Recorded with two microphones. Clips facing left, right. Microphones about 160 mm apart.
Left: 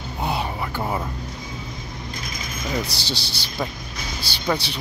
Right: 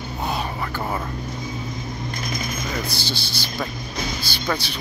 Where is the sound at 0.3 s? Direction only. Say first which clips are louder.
Left 1 dB; 20° left (ahead or behind).